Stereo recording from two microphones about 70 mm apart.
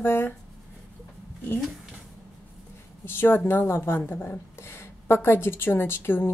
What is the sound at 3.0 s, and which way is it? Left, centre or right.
A woman's voice, left.